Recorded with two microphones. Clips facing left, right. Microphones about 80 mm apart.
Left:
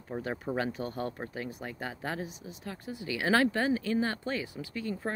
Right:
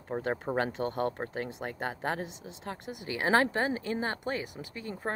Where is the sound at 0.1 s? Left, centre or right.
Right.